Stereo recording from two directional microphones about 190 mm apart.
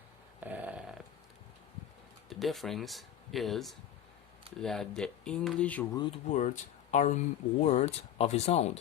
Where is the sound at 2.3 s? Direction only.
Centre (ahead or behind).